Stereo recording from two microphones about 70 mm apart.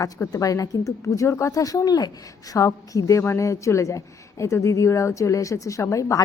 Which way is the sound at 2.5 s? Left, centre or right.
Left.